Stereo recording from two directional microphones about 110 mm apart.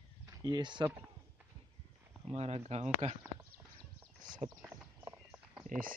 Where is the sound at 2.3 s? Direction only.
70° right (ahead or behind); by 3.2 s 85° right.